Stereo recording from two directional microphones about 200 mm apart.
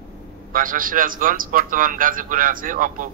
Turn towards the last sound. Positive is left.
turn(degrees=-45)  # may be behind; listen again after turning